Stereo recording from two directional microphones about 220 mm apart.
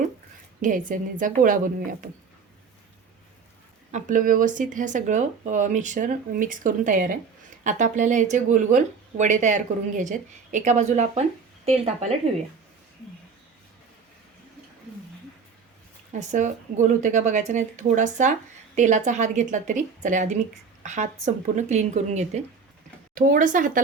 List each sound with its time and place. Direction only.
0.6 s speech: 35° right (ahead or behind)
3.9 s speech: 35° right (ahead or behind)
16.1 s speech: 35° right (ahead or behind)